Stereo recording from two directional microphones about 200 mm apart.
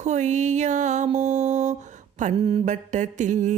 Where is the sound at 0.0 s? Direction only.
35° right (ahead or behind).